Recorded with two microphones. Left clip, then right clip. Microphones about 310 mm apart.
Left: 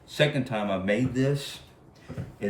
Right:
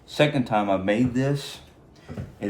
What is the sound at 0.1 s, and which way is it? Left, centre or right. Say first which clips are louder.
A man's voice: right 4 dB; centre.